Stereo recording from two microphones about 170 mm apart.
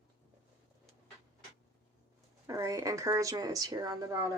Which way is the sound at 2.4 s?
15° right (ahead or behind).